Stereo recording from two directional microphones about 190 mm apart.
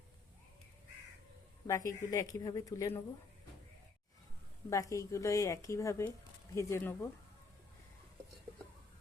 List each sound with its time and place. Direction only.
1.6 s speech: 15° left (ahead or behind)
4.7 s speech: 15° left (ahead or behind)